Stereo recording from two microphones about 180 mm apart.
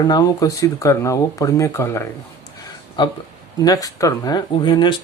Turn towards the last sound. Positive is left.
turn(degrees=25)  # may be behind; listen again after turning